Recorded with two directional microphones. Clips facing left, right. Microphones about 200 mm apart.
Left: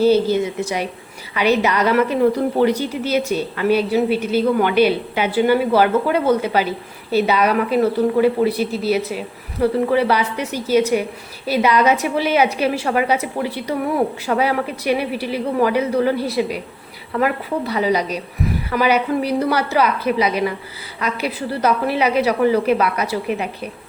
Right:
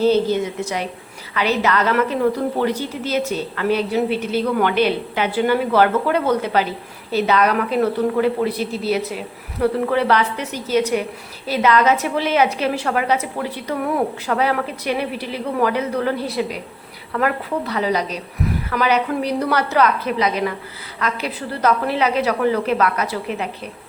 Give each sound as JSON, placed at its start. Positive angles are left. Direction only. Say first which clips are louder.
{"t": 0.0, "sound": "a woman's voice", "louder": "left 2 dB", "side_deg": 10}